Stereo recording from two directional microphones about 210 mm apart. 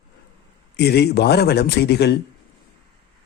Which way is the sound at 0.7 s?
50° left (ahead or behind).